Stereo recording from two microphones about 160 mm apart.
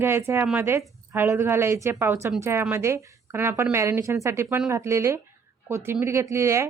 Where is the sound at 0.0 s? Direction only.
15° right (ahead or behind).